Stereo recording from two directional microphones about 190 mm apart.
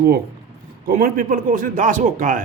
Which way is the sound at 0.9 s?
50° right (ahead or behind).